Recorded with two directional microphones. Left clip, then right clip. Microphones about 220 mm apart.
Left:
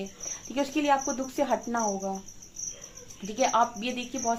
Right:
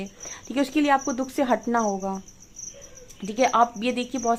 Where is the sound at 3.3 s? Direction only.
45° right (ahead or behind).